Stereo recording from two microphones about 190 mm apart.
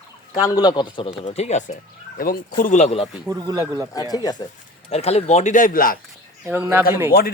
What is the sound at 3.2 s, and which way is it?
Speech, 15° right (ahead or behind).